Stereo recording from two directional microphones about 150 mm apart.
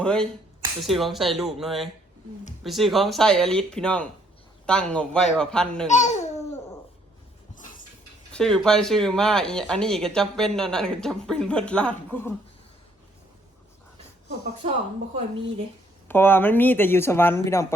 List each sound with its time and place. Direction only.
0.0 s speech: 5° left (ahead or behind)
5.9 s babbling: 50° left (ahead or behind)
8.3 s speech: 5° left (ahead or behind)
14.6 s speech: 50° right (ahead or behind)
16.0 s speech: 15° left (ahead or behind)